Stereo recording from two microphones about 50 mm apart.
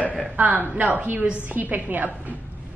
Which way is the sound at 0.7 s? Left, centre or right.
Right.